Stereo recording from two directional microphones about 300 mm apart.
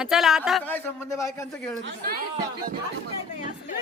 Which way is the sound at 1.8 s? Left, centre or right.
Right.